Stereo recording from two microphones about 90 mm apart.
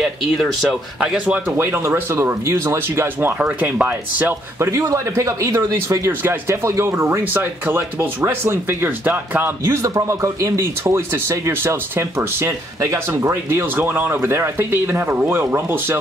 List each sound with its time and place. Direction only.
0.0 s speech: centre (ahead or behind)
1.6 s speech: 25° right (ahead or behind)
3.3 s speech: 15° right (ahead or behind)
4.6 s speech: 35° right (ahead or behind)
9.7 s speech: 40° right (ahead or behind)